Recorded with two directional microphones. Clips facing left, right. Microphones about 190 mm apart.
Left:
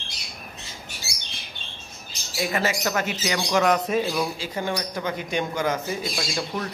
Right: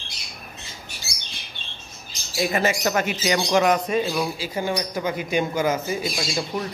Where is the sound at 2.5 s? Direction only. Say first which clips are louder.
Right 3 dB; 25° right (ahead or behind).